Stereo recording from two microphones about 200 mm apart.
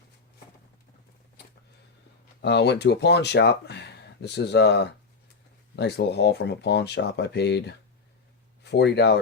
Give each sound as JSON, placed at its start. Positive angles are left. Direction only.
{"t": 2.4, "sound": "speech", "side_deg": 55}